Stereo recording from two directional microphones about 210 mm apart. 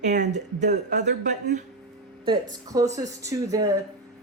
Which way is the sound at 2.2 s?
20° right (ahead or behind).